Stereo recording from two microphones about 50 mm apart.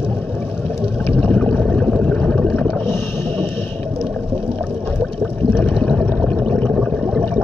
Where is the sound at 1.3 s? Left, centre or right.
Left.